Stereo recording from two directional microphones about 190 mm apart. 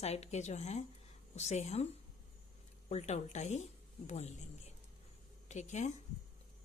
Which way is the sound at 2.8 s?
35° left (ahead or behind).